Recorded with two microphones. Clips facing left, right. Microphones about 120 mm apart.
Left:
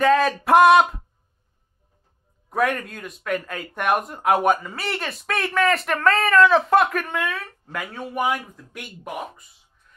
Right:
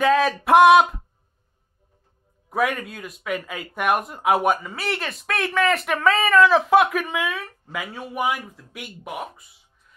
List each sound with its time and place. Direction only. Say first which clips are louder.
0.0 s speech: left 1 dB; centre (ahead or behind)
2.5 s speech: left 1 dB; 5° right (ahead or behind)